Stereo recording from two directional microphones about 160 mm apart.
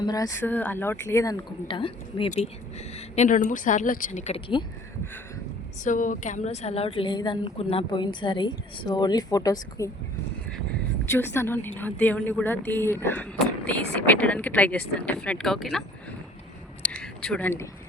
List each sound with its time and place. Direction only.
0.0 s speech: 25° left (ahead or behind)
0.4 s a woman's voice: 10° left (ahead or behind); by 4.6 s 35° left (ahead or behind)
5.8 s a woman's voice: 55° left (ahead or behind); by 9.9 s 20° left (ahead or behind)
11.0 s a woman's voice: 15° left (ahead or behind)
16.8 s a sound: 5° left (ahead or behind)